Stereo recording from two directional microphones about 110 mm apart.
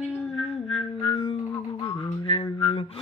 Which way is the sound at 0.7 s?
55° left (ahead or behind).